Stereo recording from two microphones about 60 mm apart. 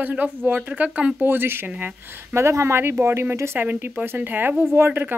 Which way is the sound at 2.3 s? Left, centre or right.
Right.